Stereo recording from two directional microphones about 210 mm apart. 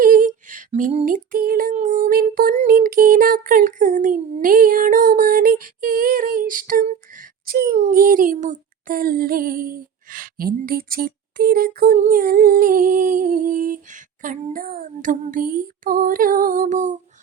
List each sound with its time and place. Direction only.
0.0 s female singing: 40° right (ahead or behind)
7.4 s a sound: 45° right (ahead or behind)
14.2 s female singing: 40° right (ahead or behind)